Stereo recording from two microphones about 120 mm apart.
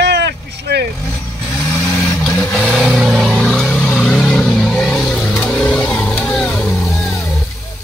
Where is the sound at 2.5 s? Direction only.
5° left (ahead or behind).